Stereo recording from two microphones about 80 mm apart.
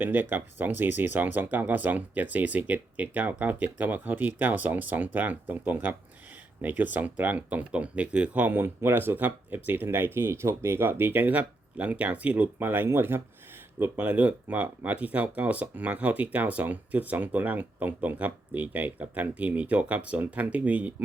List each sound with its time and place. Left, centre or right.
0.0 s speech: right